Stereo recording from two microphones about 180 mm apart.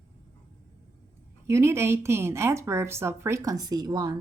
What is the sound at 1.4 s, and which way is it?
A woman's voice, 15° right (ahead or behind).